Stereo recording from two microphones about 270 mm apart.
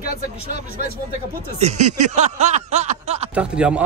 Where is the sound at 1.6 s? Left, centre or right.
Right.